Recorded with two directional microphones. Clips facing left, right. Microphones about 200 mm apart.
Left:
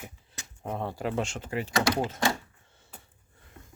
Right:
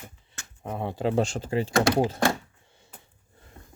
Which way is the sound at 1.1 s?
35° right (ahead or behind).